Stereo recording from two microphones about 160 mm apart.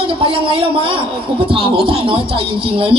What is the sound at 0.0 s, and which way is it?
A man's voice, 35° right (ahead or behind).